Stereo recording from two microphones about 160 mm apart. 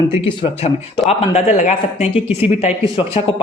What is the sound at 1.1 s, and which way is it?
Speech, 45° left (ahead or behind).